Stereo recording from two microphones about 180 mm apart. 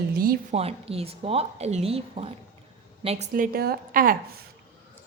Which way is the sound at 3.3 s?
50° right (ahead or behind).